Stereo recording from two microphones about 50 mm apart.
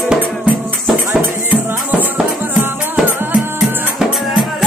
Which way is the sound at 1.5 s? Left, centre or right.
Right.